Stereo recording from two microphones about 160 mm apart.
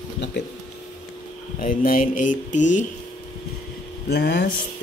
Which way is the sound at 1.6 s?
55° left (ahead or behind).